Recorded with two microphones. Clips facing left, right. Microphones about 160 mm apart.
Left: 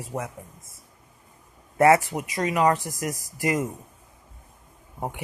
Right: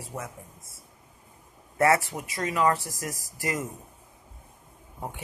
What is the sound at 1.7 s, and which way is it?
Speech, 15° left (ahead or behind).